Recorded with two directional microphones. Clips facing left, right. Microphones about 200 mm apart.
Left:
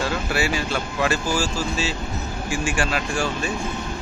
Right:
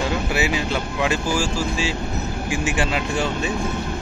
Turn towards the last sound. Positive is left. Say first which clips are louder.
# right 1 dB
turn(degrees=-20)  # may be behind; listen again after turning